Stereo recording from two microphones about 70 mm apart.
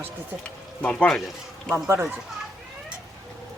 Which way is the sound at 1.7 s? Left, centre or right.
Right.